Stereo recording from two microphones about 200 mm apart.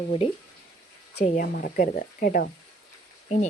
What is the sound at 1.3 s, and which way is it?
Speech, 45° left (ahead or behind).